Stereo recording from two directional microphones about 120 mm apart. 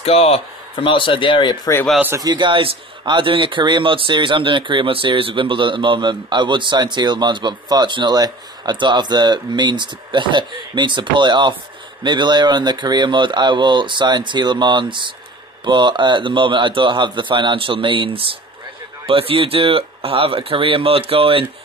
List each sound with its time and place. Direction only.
0.0 s speech: 55° left (ahead or behind)
0.8 s speech: 45° left (ahead or behind)
2.1 s a man's voice: 35° right (ahead or behind)